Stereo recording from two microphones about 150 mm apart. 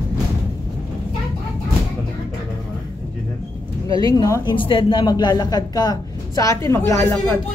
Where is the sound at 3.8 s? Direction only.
25° left (ahead or behind).